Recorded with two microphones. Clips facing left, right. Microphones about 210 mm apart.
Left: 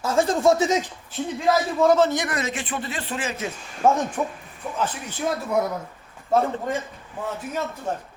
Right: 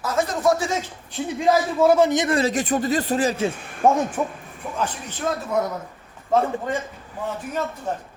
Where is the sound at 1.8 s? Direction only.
10° right (ahead or behind); by 3.5 s 35° right (ahead or behind).